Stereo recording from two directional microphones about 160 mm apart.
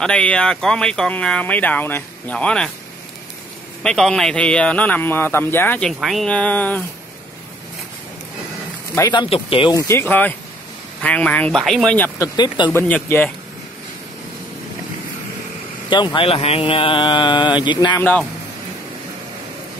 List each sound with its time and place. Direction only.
0.0 s speech: 5° left (ahead or behind)
3.8 s speech: 5° left (ahead or behind)
9.1 s speech: 30° left (ahead or behind)
9.8 s speech: 15° left (ahead or behind)
12.2 s speech: 25° left (ahead or behind)
12.7 s speech: 15° left (ahead or behind)
15.9 s speech: 30° left (ahead or behind)
17.9 s speech: 10° left (ahead or behind)